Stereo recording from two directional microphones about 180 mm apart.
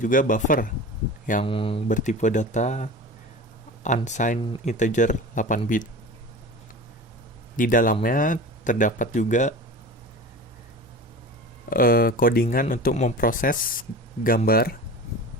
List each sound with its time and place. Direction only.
0.0 s speech: 50° left (ahead or behind)
1.5 s speech: 30° left (ahead or behind)
1.9 s speech: 45° left (ahead or behind)
7.5 s speech: 50° left (ahead or behind)
11.7 s speech: 55° left (ahead or behind)